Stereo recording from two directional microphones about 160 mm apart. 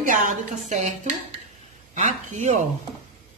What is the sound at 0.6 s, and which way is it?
Speech, 45° right (ahead or behind).